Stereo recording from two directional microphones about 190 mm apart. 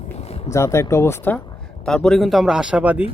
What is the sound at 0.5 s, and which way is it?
Speech, 15° left (ahead or behind).